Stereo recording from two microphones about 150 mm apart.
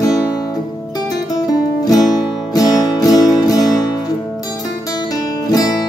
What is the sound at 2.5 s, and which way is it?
Music, 25° left (ahead or behind).